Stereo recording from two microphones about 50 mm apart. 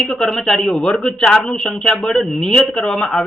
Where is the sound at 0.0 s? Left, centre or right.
Centre.